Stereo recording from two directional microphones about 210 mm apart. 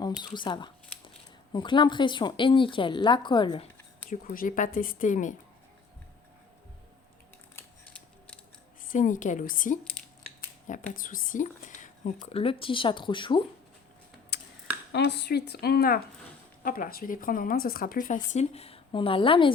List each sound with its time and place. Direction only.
0.2 s speech: 20° left (ahead or behind)
4.1 s speech: 40° left (ahead or behind)
7.5 s scissors: 5° left (ahead or behind)
8.8 s speech: 40° left (ahead or behind); by 13.4 s 25° left (ahead or behind)
14.3 s a sound: 50° left (ahead or behind)
14.9 s a woman's voice: 55° left (ahead or behind); by 19.5 s 25° left (ahead or behind)